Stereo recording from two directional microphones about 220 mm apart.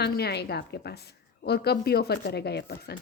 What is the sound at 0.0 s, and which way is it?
A woman's voice, 45° left (ahead or behind).